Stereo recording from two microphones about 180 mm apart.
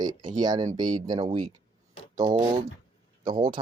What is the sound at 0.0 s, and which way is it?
Speech, 20° right (ahead or behind).